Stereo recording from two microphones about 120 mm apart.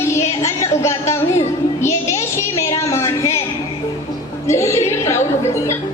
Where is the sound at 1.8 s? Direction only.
25° left (ahead or behind).